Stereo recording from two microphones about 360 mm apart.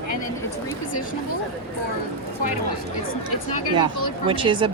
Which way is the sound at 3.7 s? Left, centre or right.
Centre.